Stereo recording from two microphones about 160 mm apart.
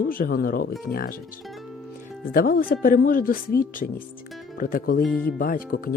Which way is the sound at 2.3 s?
65° left (ahead or behind).